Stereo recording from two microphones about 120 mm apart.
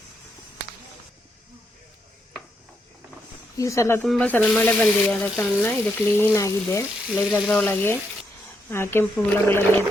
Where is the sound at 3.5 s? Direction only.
25° left (ahead or behind).